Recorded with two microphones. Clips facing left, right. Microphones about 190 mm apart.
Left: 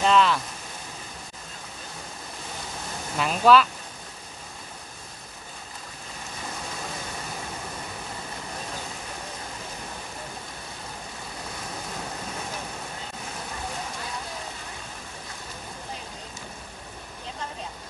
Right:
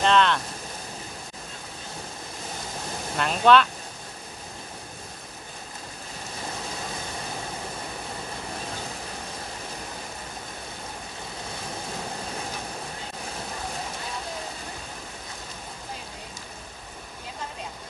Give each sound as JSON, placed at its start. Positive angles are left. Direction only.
{"t": 0.0, "sound": "speech", "side_deg": 5}
{"t": 3.2, "sound": "speech", "side_deg": 5}